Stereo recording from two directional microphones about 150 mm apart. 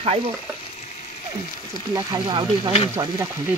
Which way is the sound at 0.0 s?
45° right (ahead or behind).